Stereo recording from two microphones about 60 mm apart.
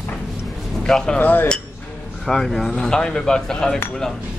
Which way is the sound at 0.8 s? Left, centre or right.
Centre.